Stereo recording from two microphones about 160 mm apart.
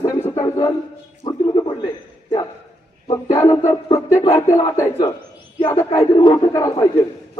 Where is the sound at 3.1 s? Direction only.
20° left (ahead or behind).